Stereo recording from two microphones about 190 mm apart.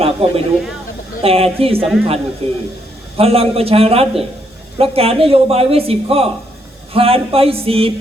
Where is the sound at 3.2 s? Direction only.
30° right (ahead or behind).